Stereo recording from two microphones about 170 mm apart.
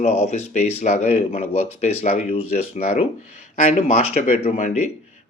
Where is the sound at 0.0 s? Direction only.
40° left (ahead or behind).